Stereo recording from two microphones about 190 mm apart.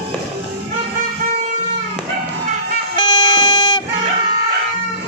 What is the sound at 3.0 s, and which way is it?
Vehicle, 25° left (ahead or behind).